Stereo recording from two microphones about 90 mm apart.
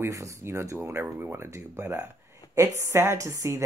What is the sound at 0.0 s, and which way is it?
Speech, 35° right (ahead or behind).